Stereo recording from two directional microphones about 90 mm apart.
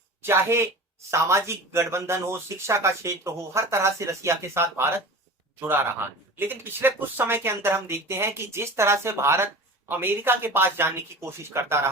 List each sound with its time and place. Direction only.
0.2 s speech: 30° right (ahead or behind)